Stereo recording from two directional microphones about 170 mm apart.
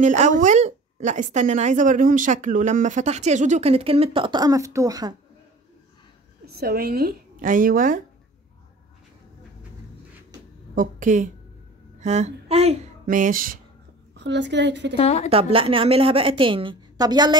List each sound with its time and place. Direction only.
0.0 s a woman's voice: 45° right (ahead or behind); by 5.1 s 20° right (ahead or behind)
6.4 s speech: 65° right (ahead or behind)
10.7 s a woman's voice: 50° right (ahead or behind)
12.0 s a sound: 40° right (ahead or behind)
13.0 s speech: 50° right (ahead or behind)
14.1 s a woman's voice: 90° right
15.0 s a woman's voice: 35° left (ahead or behind)
15.2 s a woman's voice: 35° right (ahead or behind)